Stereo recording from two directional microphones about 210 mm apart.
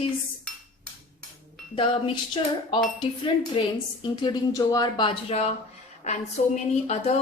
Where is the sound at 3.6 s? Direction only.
25° left (ahead or behind).